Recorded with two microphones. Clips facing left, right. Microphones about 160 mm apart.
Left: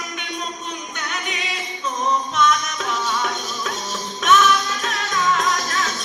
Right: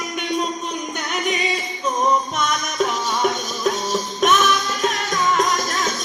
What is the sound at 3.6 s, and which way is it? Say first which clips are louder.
Music: right 7 dB; 35° right (ahead or behind).